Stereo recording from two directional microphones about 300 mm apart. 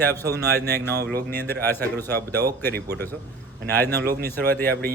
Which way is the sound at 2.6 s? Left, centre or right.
Right.